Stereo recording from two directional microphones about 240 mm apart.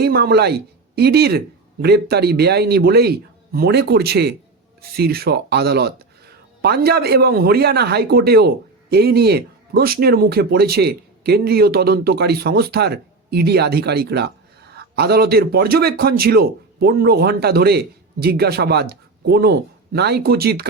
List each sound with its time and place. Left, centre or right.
0.0 s a man's voice: right